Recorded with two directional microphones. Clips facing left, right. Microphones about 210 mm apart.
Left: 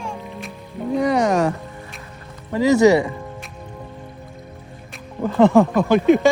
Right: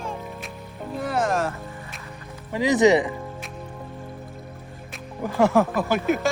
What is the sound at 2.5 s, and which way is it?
Speech, 15° right (ahead or behind).